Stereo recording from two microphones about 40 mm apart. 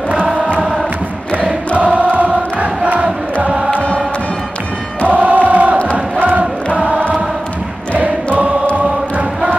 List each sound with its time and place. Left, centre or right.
1.8 s choir: right
3.7 s music: left
5.0 s choir: right
5.8 s chant: left
6.2 s choir: right